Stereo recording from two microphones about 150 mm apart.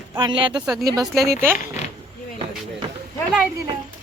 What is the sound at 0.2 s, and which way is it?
Speech, 35° right (ahead or behind).